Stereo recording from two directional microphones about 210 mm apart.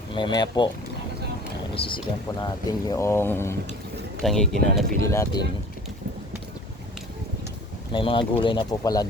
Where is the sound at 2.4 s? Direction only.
20° left (ahead or behind).